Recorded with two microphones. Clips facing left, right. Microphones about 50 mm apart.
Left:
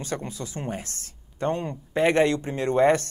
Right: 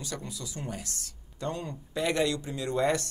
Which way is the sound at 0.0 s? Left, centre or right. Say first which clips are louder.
Left 7 dB; left.